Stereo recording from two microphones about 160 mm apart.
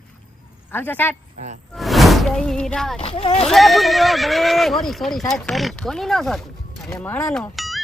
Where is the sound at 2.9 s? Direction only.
35° left (ahead or behind).